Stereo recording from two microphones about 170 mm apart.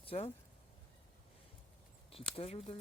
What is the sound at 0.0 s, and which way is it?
Speech, 35° left (ahead or behind).